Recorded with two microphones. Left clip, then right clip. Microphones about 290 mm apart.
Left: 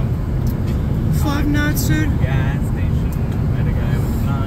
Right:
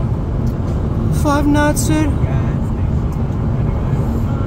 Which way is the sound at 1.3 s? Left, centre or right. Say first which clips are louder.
Right 7 dB; right.